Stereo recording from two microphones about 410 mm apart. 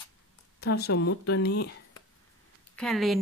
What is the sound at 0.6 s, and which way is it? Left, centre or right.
Speech, left.